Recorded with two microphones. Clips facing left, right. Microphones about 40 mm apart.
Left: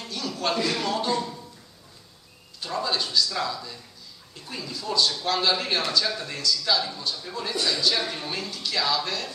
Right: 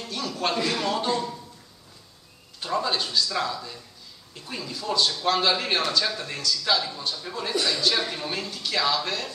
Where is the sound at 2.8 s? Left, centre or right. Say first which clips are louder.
Even; right.